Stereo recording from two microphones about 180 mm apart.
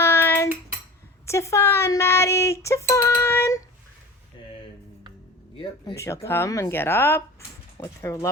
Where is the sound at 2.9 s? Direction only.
15° left (ahead or behind).